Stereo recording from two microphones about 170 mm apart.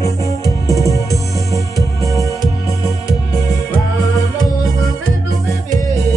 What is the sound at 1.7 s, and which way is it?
Music, 20° right (ahead or behind).